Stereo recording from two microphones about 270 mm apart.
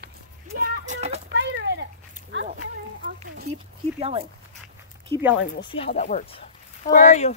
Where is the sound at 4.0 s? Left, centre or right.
Right.